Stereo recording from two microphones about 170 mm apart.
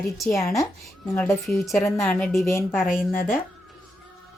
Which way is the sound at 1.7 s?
15° left (ahead or behind).